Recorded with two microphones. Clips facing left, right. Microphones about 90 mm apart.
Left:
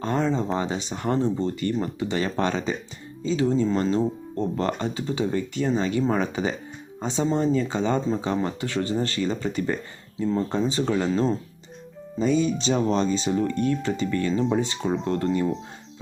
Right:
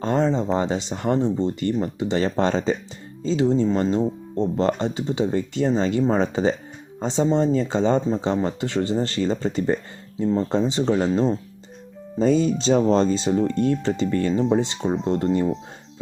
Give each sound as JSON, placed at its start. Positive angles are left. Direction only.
{"t": 0.0, "sound": "a sound", "side_deg": -25}
{"t": 0.5, "sound": "speech", "side_deg": -30}
{"t": 12.2, "sound": "speech", "side_deg": -35}